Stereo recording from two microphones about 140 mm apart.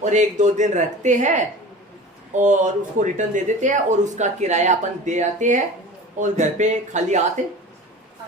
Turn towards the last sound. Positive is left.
turn(degrees=-60)  # may be behind; listen again after turning